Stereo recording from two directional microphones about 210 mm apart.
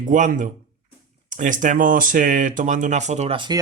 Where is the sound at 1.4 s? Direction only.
40° right (ahead or behind).